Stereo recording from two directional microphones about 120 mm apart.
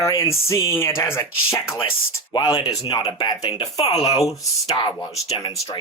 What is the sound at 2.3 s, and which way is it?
Speech, 35° left (ahead or behind).